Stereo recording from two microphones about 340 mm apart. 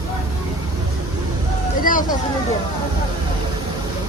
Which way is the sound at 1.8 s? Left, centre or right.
Left.